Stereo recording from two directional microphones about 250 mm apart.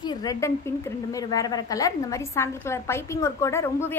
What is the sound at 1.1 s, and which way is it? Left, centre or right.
A woman's voice, centre.